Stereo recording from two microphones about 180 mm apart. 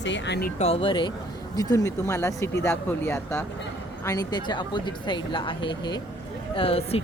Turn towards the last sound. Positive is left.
turn(degrees=30)  # may be behind; listen again after turning